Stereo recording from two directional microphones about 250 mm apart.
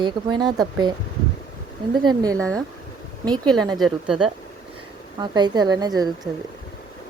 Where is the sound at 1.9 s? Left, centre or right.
Centre.